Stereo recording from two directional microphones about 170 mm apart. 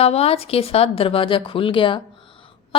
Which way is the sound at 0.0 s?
35° left (ahead or behind).